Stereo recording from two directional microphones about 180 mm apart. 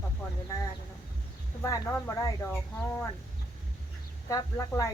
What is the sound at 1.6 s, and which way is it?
Speech, 20° left (ahead or behind).